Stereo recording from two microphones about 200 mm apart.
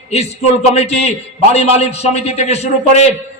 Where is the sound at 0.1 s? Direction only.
30° left (ahead or behind).